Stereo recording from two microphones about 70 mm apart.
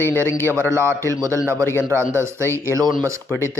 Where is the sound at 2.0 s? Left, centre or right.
Right.